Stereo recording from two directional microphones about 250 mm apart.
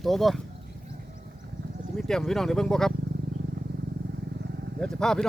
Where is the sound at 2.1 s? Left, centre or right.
Centre.